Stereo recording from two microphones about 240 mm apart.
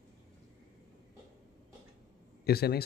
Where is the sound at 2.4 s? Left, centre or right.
Left.